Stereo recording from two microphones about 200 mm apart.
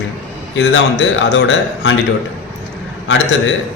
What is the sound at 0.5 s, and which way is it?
Speech, 65° left (ahead or behind).